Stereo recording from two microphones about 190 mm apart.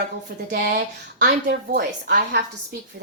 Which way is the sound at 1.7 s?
55° right (ahead or behind).